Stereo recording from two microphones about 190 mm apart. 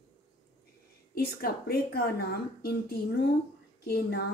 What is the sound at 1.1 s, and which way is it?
A woman's voice, 55° left (ahead or behind).